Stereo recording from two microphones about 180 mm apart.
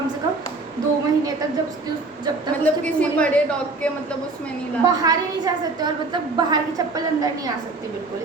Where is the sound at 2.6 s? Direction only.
5° left (ahead or behind).